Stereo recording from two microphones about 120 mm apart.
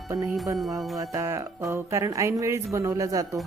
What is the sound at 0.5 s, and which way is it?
Music, centre (ahead or behind).